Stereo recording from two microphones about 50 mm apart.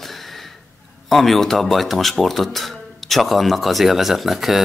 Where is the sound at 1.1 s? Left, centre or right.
Centre.